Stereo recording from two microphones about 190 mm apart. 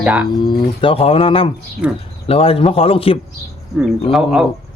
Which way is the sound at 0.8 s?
30° left (ahead or behind).